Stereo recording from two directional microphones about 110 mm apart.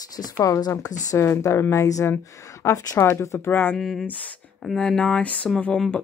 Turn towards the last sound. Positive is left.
turn(degrees=10)  # may be behind; listen again after turning